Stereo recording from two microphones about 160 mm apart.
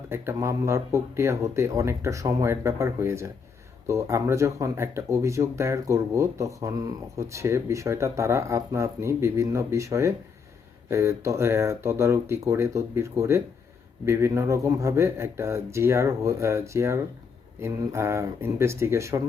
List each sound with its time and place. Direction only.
0.1 s speech: 15° right (ahead or behind)